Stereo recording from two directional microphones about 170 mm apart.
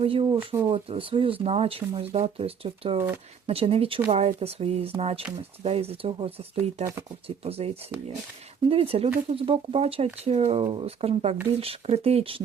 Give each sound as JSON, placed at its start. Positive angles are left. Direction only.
{"t": 0.0, "sound": "speech", "side_deg": -35}
{"t": 0.3, "sound": "speech", "side_deg": -20}
{"t": 0.7, "sound": "speech", "side_deg": -35}
{"t": 8.7, "sound": "speech", "side_deg": -35}